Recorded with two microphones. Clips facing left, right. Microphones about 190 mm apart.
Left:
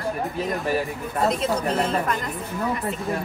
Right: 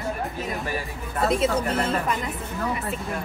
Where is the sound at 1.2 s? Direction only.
5° right (ahead or behind).